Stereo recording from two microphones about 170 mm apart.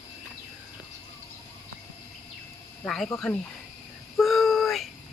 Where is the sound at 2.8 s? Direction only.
Centre (ahead or behind).